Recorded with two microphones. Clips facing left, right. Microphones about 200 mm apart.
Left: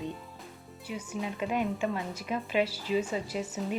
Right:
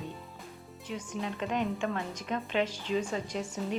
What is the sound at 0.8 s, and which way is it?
A woman's voice, 10° left (ahead or behind).